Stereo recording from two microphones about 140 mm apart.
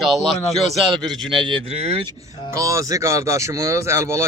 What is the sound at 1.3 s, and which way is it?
Speech, 35° right (ahead or behind).